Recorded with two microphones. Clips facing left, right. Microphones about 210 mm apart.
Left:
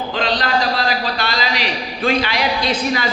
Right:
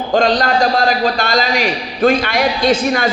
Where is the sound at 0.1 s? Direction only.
45° right (ahead or behind).